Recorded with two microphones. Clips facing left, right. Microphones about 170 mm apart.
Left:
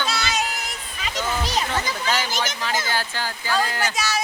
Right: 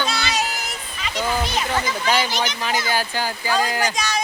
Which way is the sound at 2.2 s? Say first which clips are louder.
Right 2 dB; 45° left (ahead or behind).